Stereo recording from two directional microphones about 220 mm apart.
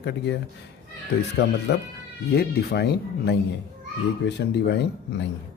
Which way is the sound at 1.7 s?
50° left (ahead or behind).